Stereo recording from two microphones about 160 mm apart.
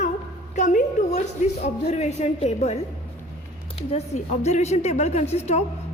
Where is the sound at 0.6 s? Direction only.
50° left (ahead or behind).